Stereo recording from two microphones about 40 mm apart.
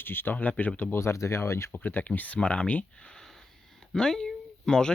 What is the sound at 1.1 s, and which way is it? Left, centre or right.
Speech, left.